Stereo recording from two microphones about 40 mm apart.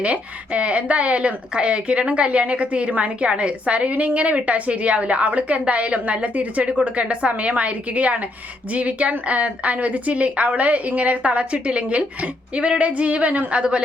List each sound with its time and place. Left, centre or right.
0.0 s a woman's voice: right
13.5 s a woman's voice: right